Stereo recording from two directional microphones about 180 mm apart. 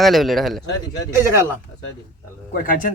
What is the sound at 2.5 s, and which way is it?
Speech, 50° left (ahead or behind).